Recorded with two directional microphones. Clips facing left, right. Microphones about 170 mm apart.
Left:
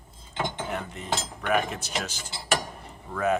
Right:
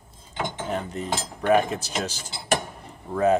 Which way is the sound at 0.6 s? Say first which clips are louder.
Right 5 dB; 35° right (ahead or behind).